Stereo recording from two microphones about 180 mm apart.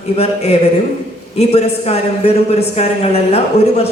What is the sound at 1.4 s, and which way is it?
A woman's voice, 35° left (ahead or behind).